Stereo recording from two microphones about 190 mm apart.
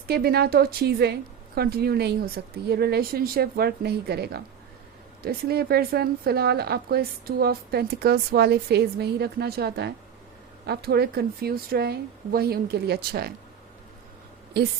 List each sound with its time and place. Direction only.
0.1 s a woman's voice: 55° right (ahead or behind)